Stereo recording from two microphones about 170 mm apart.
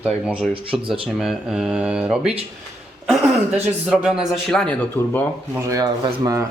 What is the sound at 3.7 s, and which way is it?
Speech, 5° right (ahead or behind).